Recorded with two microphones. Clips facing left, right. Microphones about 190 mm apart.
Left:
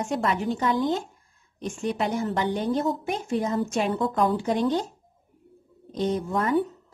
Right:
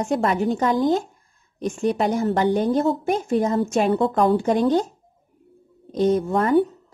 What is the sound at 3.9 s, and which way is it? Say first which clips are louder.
Speech: right 5 dB; 65° right (ahead or behind).